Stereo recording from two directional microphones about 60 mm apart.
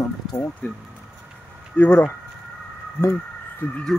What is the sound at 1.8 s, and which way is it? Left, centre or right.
Speech, left.